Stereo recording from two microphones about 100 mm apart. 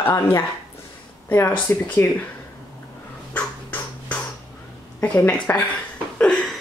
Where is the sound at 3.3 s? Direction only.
15° left (ahead or behind).